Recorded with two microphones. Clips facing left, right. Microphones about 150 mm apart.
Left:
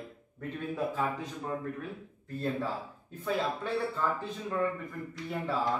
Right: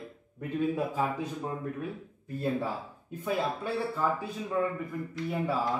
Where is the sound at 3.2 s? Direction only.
10° right (ahead or behind).